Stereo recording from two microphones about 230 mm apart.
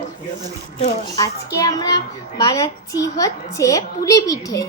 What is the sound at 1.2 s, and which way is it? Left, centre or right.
A woman's voice, centre.